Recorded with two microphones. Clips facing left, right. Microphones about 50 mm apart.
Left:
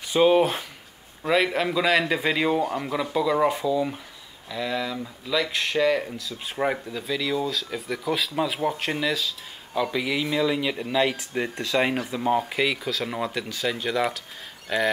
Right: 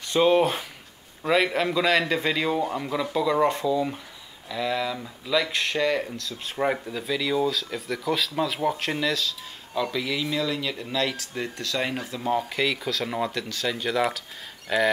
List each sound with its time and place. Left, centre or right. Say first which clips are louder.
0.0 s speech: left 1 dB; centre